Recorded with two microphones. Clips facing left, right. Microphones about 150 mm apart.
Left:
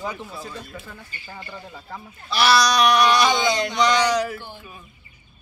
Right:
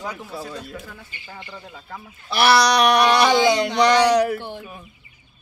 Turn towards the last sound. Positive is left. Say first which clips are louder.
# right 7 dB
turn(degrees=-70)  # may be behind; listen again after turning